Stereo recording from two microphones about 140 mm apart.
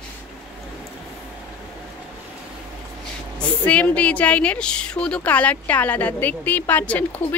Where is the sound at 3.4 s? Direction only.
10° left (ahead or behind).